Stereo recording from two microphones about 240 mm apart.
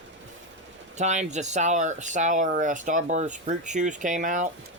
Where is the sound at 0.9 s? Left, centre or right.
Right.